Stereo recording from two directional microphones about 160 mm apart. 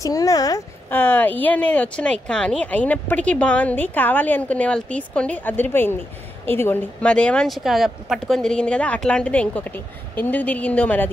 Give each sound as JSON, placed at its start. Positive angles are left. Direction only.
{"t": 0.0, "sound": "speech", "side_deg": 20}
{"t": 0.8, "sound": "a woman's voice", "side_deg": 10}